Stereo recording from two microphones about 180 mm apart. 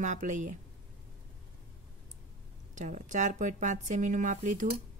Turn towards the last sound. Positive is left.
turn(degrees=-45)  # may be behind; listen again after turning